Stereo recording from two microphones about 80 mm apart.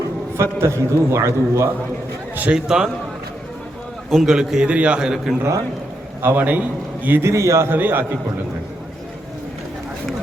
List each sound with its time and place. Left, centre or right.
0.6 s a man's voice: right
2.3 s a man's voice: right
2.6 s a man's voice: centre
4.1 s a man's voice: centre
6.2 s a man's voice: right
7.2 s a man's voice: right
7.7 s a man's voice: right